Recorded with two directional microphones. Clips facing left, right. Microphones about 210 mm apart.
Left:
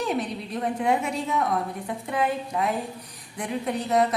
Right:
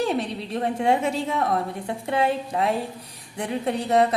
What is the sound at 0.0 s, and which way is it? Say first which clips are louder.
A woman's voice: right 2 dB; 30° right (ahead or behind).